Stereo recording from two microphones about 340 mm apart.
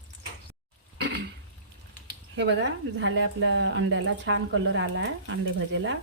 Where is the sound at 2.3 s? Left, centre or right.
Right.